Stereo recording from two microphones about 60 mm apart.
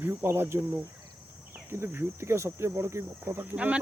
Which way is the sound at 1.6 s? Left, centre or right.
Right.